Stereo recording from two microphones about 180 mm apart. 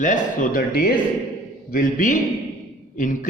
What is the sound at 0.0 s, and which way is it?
Speech, 45° left (ahead or behind).